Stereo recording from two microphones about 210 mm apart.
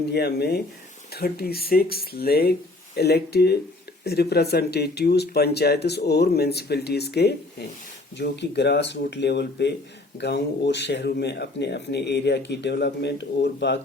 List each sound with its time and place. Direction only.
0.0 s speech: 50° left (ahead or behind)